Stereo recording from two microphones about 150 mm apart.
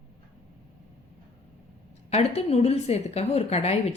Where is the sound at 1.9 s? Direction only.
45° left (ahead or behind).